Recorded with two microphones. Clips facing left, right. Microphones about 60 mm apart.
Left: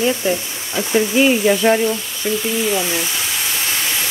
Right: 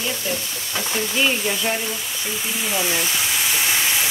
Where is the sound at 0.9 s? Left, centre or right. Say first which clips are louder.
Left 8 dB; left.